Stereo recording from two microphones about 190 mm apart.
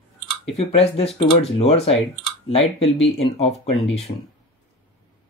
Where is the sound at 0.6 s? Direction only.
30° left (ahead or behind).